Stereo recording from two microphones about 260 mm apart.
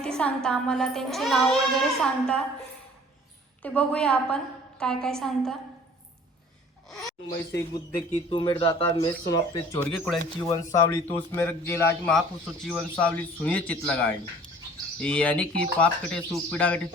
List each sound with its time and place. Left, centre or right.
0.0 s speech: centre
3.6 s speech: centre
7.3 s a man's voice: left
8.1 s a man's voice: centre